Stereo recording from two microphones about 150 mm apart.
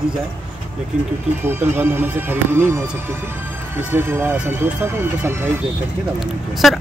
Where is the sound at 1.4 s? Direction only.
15° right (ahead or behind).